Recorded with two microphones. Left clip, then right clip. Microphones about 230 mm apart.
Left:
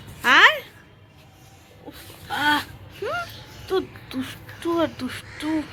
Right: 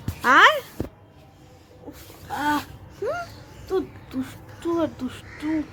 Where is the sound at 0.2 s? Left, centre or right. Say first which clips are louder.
Even; centre.